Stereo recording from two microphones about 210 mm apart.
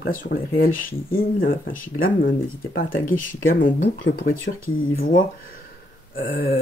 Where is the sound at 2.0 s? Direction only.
65° left (ahead or behind).